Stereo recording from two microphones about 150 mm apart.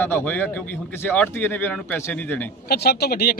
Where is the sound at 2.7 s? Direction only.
90° left.